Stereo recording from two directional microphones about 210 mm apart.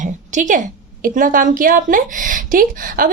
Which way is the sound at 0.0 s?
35° right (ahead or behind).